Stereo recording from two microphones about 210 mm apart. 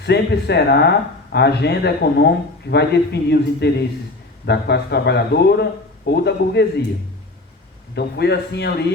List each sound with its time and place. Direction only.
0.0 s speech: 55° left (ahead or behind)
7.9 s speech: 50° left (ahead or behind)